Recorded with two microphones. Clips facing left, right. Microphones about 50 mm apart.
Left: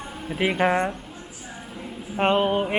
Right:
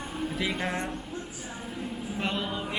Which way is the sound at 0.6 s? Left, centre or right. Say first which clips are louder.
Left 10 dB; left.